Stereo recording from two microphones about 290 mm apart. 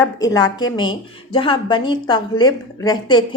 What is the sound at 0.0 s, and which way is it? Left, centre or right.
A woman's voice, centre.